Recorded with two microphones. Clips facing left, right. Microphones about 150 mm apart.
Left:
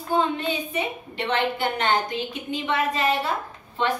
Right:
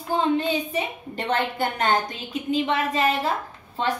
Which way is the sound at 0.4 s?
35° right (ahead or behind).